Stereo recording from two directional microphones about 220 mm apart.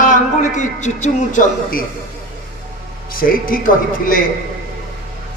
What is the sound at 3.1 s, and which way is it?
Speech, 40° left (ahead or behind).